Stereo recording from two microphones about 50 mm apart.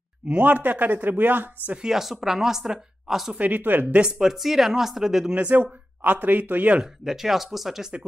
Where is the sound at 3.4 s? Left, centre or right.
Right.